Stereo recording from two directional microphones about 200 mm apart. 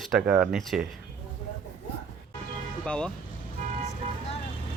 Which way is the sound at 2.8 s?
5° left (ahead or behind).